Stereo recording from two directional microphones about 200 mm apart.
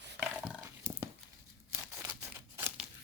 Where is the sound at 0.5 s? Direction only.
15° right (ahead or behind).